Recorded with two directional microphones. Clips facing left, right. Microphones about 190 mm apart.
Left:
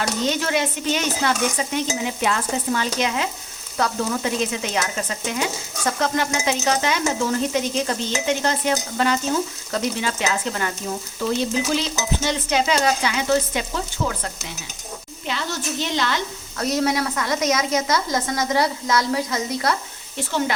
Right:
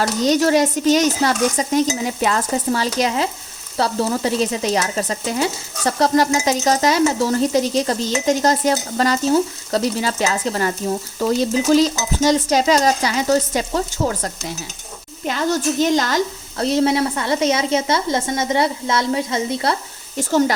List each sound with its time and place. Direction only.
0.2 s sizzle: 40° right (ahead or behind)
15.2 s speech: 45° right (ahead or behind)
16.6 s a woman's voice: 25° right (ahead or behind)